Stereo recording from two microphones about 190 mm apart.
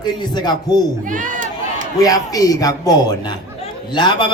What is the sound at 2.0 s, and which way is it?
Speech, 20° left (ahead or behind).